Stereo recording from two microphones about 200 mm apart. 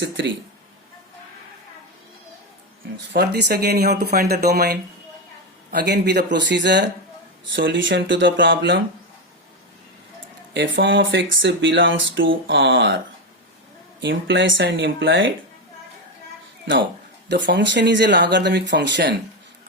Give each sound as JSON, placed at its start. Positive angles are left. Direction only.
{"t": 0.0, "sound": "speech", "side_deg": -65}
{"t": 3.1, "sound": "speech", "side_deg": -55}
{"t": 10.5, "sound": "speech", "side_deg": -65}
{"t": 14.0, "sound": "speech", "side_deg": -65}
{"t": 17.2, "sound": "speech", "side_deg": -60}